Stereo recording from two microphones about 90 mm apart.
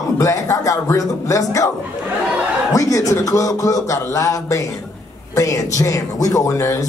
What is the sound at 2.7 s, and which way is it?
A man's voice, 40° left (ahead or behind).